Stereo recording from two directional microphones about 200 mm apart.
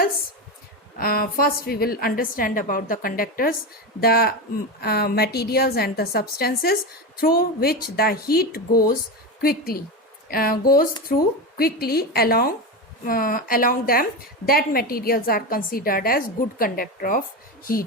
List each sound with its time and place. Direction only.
0.9 s a woman's voice: 45° left (ahead or behind)